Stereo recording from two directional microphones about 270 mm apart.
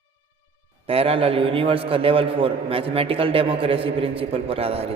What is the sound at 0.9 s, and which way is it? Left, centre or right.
A man's voice, right.